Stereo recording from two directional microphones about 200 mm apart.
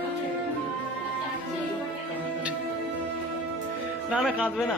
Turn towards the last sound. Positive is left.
turn(degrees=0)  # may be behind; listen again after turning